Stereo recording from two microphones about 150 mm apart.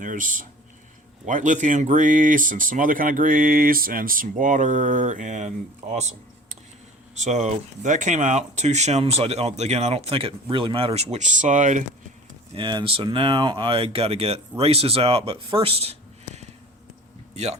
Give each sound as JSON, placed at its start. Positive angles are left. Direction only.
{"t": 0.0, "sound": "speech", "side_deg": -60}
{"t": 7.2, "sound": "speech", "side_deg": -50}
{"t": 12.5, "sound": "speech", "side_deg": -35}